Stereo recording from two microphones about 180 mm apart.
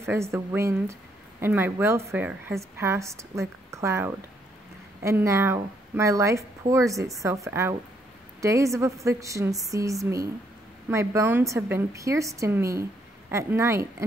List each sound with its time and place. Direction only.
0.0 s a woman's voice: 15° right (ahead or behind)